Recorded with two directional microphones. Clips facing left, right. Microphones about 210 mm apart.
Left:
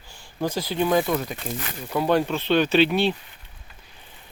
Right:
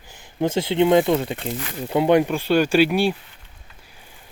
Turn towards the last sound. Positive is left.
turn(degrees=-10)  # may be behind; listen again after turning